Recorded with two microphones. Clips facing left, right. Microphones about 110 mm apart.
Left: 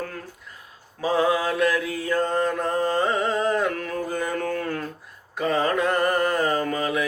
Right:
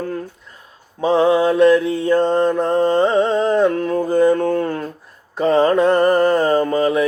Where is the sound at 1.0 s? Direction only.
25° right (ahead or behind).